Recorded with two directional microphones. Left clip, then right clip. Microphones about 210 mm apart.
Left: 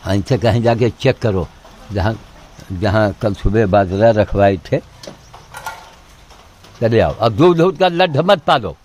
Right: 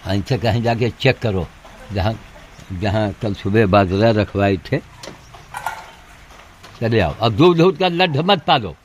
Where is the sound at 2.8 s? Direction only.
15° left (ahead or behind).